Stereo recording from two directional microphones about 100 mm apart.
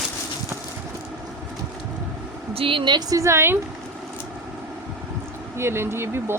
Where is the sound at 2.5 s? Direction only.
65° right (ahead or behind).